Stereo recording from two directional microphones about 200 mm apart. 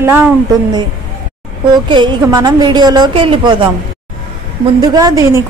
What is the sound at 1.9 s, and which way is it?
A woman's voice, 20° right (ahead or behind).